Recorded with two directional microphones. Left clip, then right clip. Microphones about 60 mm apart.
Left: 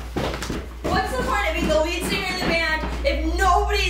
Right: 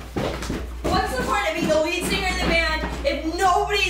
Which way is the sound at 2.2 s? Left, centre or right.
Centre.